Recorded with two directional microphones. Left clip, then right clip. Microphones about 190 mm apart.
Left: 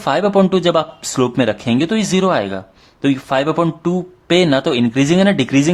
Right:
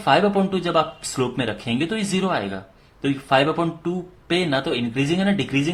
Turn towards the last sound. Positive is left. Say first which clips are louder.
# left 8 dB
turn(degrees=35)  # may be behind; listen again after turning